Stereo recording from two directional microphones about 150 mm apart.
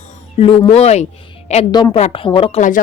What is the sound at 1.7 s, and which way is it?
Speech, 30° left (ahead or behind).